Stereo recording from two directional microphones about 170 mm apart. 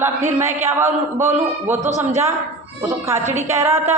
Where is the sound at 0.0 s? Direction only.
15° right (ahead or behind).